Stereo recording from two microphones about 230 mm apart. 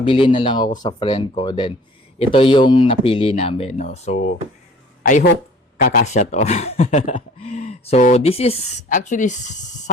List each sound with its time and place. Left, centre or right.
0.0 s speech: left